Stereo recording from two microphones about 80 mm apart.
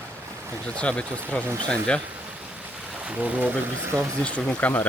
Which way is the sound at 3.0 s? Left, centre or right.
Centre.